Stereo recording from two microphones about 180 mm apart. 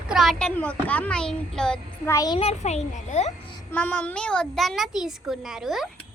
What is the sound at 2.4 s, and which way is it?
Speech, 35° left (ahead or behind).